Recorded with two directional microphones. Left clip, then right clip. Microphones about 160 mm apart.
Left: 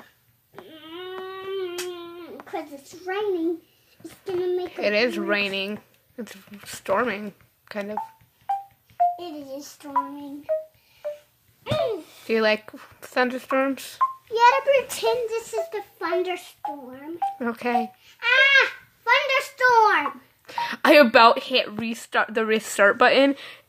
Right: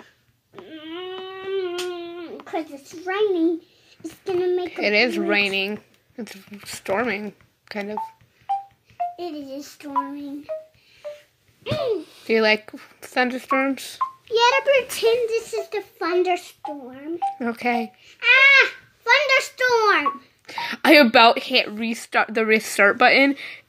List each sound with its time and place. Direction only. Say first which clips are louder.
1.1 s a sound: right 3 dB; 20° right (ahead or behind)
4.2 s speech: right 3 dB; 20° right (ahead or behind)
4.6 s speech: right 1 dB; 10° left (ahead or behind)
8.5 s telephone dialing: right 2 dB; 5° left (ahead or behind)
11.8 s speech: right 2 dB; 10° left (ahead or behind)
15.2 s a child's voice: right 3 dB; 10° right (ahead or behind)
17.2 s speech: right 1 dB; 5° left (ahead or behind)
18.2 s a sound: right 4 dB; 10° right (ahead or behind)
20.4 s speech: right 1 dB; 5° left (ahead or behind)